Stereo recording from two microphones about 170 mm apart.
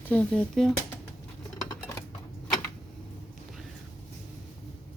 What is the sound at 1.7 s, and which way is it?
Scissors, 15° left (ahead or behind).